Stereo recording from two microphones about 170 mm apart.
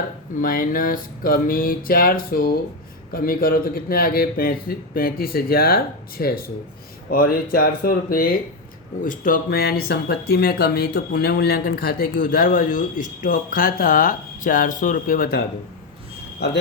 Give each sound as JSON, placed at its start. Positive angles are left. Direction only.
{"t": 0.4, "sound": "speech", "side_deg": 55}